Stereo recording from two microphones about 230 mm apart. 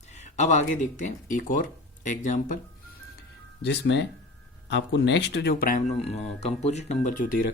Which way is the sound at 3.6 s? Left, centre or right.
Left.